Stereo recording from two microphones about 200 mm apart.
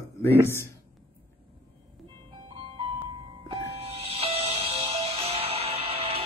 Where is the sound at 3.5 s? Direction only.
30° right (ahead or behind).